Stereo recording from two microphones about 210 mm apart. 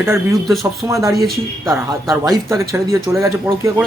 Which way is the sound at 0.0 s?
10° right (ahead or behind).